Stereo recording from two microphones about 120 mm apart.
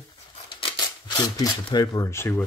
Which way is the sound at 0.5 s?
40° left (ahead or behind).